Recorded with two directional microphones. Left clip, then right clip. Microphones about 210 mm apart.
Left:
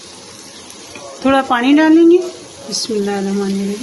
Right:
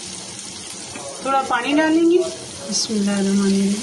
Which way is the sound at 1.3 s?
50° left (ahead or behind).